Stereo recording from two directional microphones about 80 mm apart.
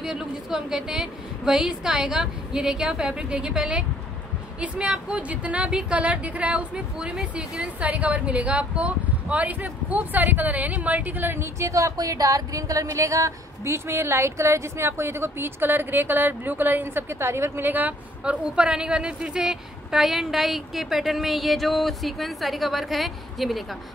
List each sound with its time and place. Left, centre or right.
0.0 s a woman's voice: centre